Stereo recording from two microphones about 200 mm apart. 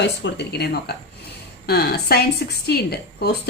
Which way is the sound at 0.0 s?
60° left (ahead or behind).